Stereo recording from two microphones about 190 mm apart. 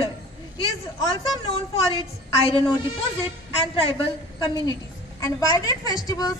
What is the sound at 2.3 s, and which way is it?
Speech, 30° left (ahead or behind).